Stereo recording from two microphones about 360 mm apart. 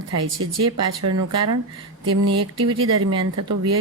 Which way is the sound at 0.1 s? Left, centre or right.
Right.